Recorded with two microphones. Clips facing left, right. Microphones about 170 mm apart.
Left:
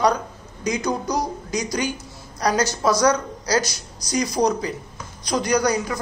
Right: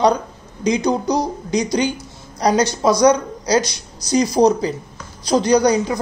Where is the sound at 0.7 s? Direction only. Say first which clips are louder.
Right 6 dB; 25° right (ahead or behind).